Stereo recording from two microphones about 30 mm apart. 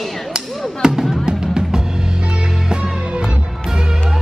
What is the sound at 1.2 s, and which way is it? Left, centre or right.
Music, right.